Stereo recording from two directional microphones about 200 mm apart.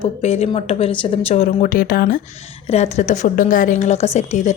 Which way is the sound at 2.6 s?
35° left (ahead or behind).